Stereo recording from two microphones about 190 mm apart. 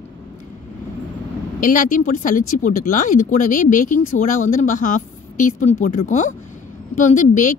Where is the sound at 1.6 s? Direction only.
45° left (ahead or behind).